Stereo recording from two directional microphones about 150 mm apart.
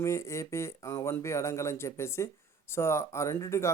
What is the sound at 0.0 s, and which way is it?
Speech, 20° left (ahead or behind).